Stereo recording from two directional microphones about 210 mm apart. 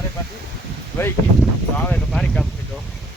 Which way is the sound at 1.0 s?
10° left (ahead or behind).